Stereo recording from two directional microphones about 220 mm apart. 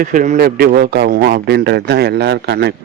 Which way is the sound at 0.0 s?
35° right (ahead or behind).